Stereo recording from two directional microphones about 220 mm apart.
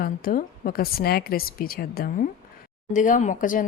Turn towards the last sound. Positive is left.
turn(degrees=35)  # may be behind; listen again after turning